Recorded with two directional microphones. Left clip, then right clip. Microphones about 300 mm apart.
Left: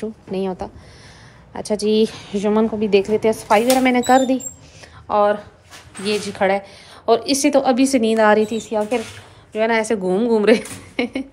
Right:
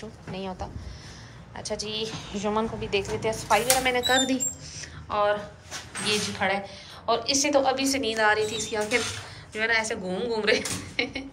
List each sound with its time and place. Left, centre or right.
0.3 s a woman's voice: left